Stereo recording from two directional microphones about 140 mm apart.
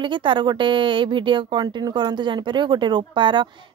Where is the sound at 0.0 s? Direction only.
35° right (ahead or behind).